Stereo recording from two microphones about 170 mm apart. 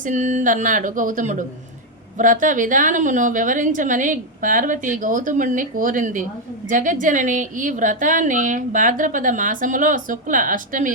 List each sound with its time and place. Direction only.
0.0 s a woman's voice: 45° right (ahead or behind)